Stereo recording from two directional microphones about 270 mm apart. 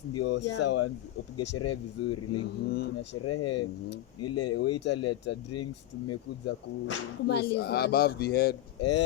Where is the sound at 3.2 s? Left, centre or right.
Left.